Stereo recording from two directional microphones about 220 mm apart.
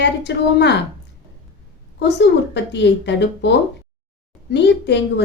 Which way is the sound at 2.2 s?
50° left (ahead or behind).